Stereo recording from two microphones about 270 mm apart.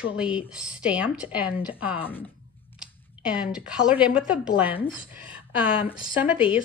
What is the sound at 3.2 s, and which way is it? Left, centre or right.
Speech, centre.